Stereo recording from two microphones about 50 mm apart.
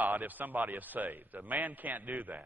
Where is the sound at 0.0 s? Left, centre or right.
Right.